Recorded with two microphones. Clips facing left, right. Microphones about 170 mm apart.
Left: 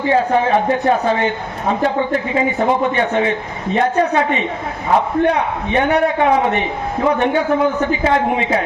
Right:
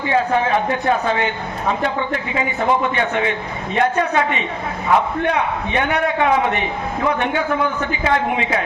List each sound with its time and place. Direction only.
0.1 s a man's voice: 35° left (ahead or behind)